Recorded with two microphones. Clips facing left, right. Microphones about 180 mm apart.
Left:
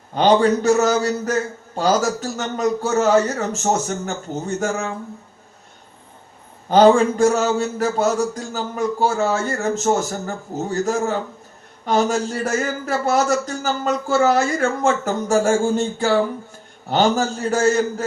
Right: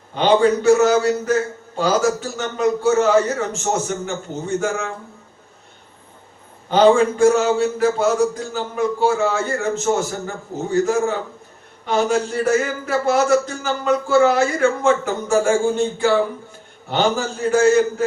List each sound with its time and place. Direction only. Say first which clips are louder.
0.1 s a man's voice: even; 40° left (ahead or behind)
6.7 s a man's voice: left 1 dB; 40° left (ahead or behind)